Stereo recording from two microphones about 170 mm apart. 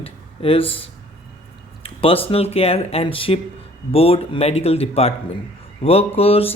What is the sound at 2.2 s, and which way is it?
Speech, 35° left (ahead or behind).